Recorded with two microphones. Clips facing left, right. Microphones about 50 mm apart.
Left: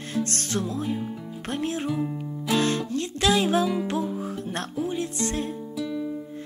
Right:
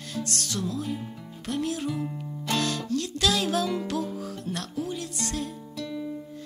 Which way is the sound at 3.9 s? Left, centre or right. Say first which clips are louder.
Left 3 dB; left.